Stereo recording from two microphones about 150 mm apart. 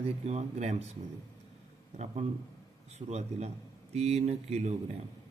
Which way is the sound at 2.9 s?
45° right (ahead or behind).